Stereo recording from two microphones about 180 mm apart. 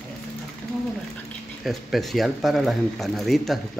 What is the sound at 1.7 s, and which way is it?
A woman's voice, centre (ahead or behind).